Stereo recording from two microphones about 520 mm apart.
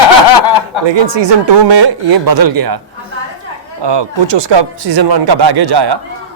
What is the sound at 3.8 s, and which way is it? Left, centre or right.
Speech, right.